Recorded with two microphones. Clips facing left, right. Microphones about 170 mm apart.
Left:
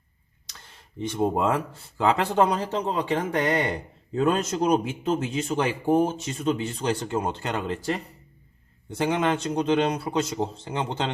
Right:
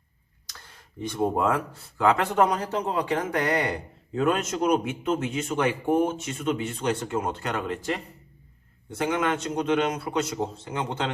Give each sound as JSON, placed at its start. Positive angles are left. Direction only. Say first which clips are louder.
{"t": 1.0, "sound": "speech", "louder": "left 1 dB", "side_deg": 25}